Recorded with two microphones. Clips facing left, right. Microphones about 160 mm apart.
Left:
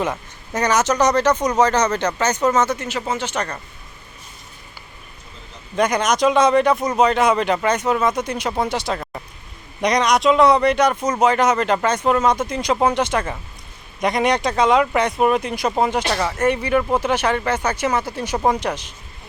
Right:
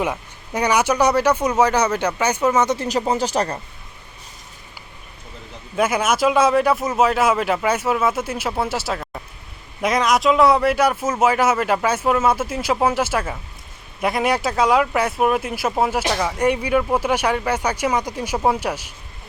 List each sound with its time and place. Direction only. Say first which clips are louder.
0.0 s speech: even; 10° right (ahead or behind)
2.7 s speech: right 4 dB; 35° right (ahead or behind)
5.7 s speech: left 1 dB; 5° right (ahead or behind)